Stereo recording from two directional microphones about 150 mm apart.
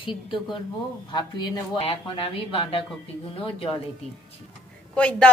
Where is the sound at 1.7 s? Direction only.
35° left (ahead or behind).